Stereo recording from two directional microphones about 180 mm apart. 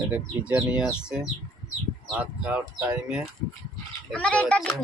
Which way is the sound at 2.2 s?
10° right (ahead or behind).